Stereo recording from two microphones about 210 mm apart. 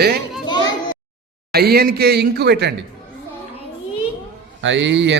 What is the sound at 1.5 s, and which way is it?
A man's voice, 45° right (ahead or behind).